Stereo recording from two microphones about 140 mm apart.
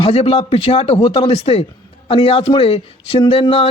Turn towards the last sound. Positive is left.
turn(degrees=40)  # may be behind; listen again after turning